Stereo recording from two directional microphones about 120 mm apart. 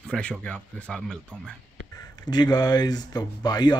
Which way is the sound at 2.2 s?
35° left (ahead or behind).